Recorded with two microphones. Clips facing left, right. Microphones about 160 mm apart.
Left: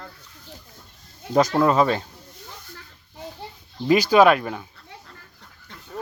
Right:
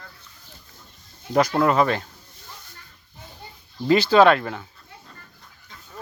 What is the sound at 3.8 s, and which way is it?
Speech, 15° left (ahead or behind).